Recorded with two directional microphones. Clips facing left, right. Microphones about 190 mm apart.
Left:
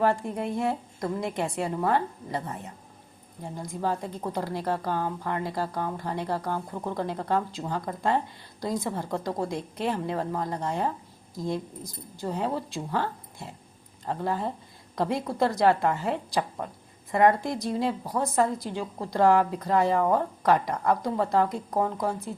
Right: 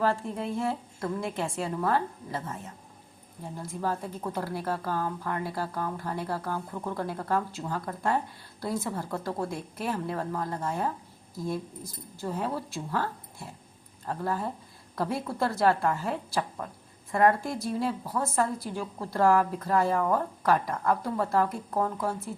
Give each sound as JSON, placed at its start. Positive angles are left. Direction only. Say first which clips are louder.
{"t": 0.0, "sound": "a woman's voice", "louder": "left 3 dB", "side_deg": 15}
{"t": 12.2, "sound": "a woman's voice", "louder": "left 2 dB", "side_deg": 15}